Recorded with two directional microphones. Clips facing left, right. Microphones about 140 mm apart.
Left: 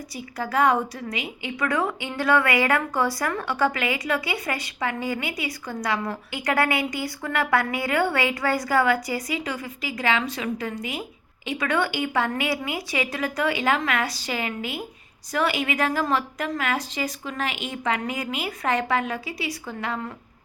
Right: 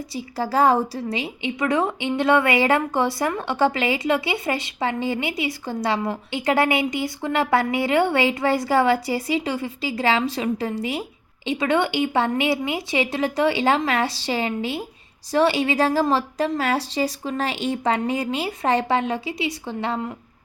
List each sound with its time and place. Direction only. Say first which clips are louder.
0.1 s a woman's voice: right 3 dB; 30° right (ahead or behind)